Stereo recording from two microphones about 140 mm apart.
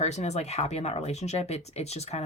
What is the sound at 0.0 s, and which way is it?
Speech, 55° left (ahead or behind).